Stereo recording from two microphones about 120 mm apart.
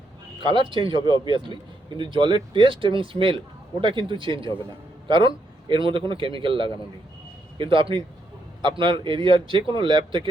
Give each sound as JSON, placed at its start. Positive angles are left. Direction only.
{"t": 0.5, "sound": "a man's voice", "side_deg": -45}